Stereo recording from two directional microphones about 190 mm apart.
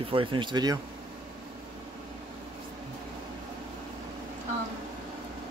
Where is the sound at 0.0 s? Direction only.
25° right (ahead or behind).